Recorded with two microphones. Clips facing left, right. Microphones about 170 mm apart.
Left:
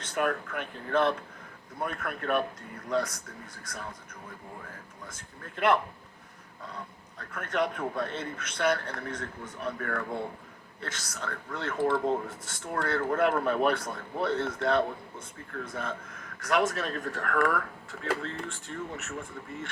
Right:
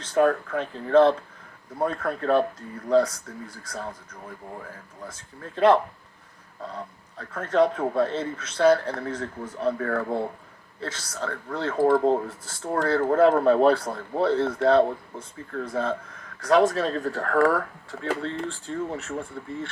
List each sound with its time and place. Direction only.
0.0 s a man's voice: 30° right (ahead or behind)
5.0 s a man's voice: 30° right (ahead or behind)